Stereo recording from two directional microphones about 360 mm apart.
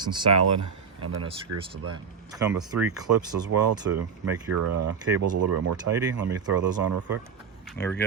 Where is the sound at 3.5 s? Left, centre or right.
Right.